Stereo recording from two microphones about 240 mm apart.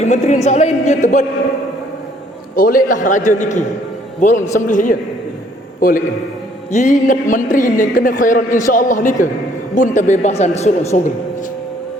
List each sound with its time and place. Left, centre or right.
0.0 s a man's voice: left
2.6 s a man's voice: left